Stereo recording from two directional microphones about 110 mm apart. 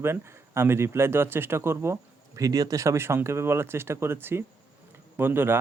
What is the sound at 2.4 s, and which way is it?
Speech, 35° right (ahead or behind).